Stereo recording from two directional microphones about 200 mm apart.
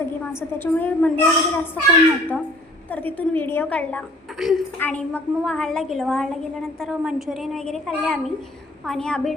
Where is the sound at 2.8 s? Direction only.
10° left (ahead or behind).